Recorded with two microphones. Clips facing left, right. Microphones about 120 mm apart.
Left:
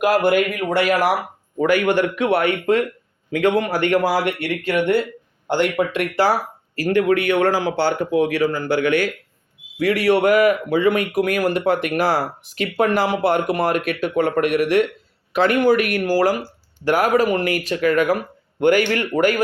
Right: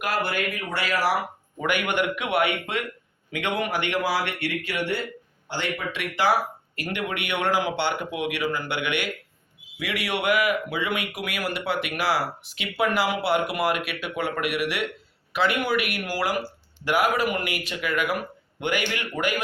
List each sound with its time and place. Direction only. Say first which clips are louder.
0.0 s speech: left 10 dB; 45° left (ahead or behind)
1.5 s speech: left 8 dB; 35° left (ahead or behind)
18.8 s speech: left 10 dB; 50° left (ahead or behind)